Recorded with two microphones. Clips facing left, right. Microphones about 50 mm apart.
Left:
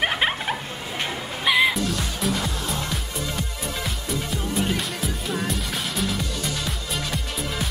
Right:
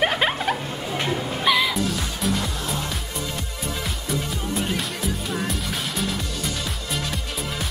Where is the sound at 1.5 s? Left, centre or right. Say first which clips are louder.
Even; centre.